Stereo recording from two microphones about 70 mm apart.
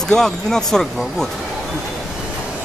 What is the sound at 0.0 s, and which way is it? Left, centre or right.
Speech, centre.